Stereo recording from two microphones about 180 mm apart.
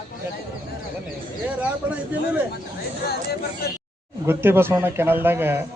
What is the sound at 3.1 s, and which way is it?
Speech, 60° left (ahead or behind).